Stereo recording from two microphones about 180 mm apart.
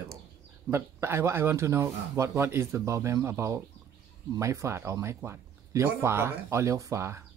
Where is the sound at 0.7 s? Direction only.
15° right (ahead or behind).